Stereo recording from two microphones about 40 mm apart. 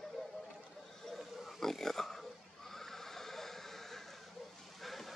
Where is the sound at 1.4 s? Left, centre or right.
Centre.